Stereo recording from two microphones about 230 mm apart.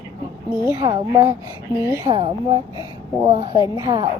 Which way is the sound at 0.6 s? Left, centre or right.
Centre.